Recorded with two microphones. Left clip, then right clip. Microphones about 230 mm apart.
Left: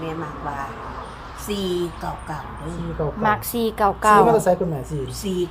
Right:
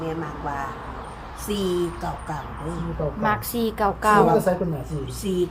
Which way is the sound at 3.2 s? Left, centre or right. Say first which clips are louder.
Left 3 dB; centre.